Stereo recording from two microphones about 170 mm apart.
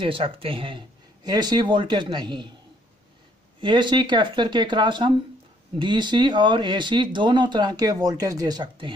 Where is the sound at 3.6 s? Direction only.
30° right (ahead or behind).